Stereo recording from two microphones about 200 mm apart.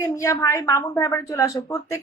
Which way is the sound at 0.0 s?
15° left (ahead or behind).